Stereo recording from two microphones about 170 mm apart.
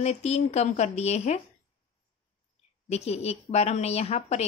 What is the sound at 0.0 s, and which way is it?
A woman's voice, 40° left (ahead or behind).